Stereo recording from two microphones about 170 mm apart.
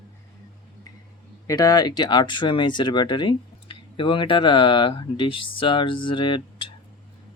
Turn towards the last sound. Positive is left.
turn(degrees=30)  # may be behind; listen again after turning